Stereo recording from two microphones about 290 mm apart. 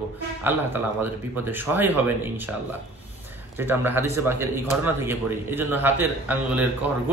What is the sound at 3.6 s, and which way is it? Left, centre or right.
A man's voice, centre.